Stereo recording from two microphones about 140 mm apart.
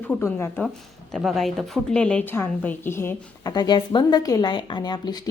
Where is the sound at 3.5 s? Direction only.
30° left (ahead or behind).